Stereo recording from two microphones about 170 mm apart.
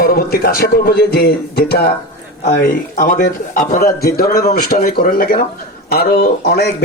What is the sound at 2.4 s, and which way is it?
Speech, 55° left (ahead or behind).